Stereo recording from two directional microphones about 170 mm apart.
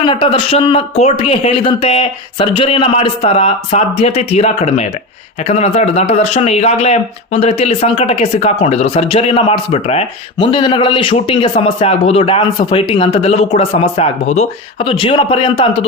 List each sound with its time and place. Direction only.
0.0 s speech: 30° left (ahead or behind)